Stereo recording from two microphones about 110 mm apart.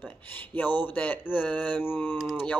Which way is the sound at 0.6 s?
15° left (ahead or behind).